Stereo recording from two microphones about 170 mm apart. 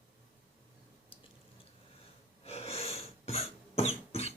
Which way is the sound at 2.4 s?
35° left (ahead or behind).